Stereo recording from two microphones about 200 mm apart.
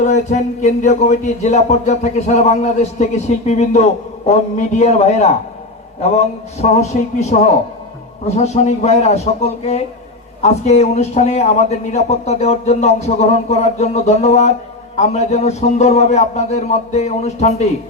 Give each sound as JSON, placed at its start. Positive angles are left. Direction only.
{"t": 0.0, "sound": "a man's voice", "side_deg": 35}